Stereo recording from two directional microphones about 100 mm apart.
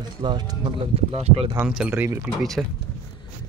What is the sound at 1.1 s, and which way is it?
Speech, 90° right.